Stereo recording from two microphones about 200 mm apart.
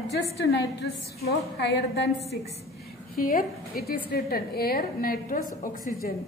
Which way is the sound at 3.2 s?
45° left (ahead or behind).